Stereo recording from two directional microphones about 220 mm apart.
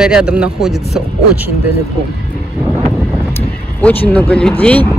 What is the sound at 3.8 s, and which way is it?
Speech, 10° left (ahead or behind).